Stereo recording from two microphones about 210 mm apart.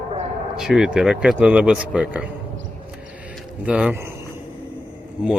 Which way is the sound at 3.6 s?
5° right (ahead or behind).